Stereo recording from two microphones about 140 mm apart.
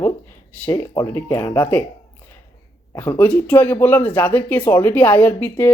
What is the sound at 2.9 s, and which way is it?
Speech, 20° left (ahead or behind).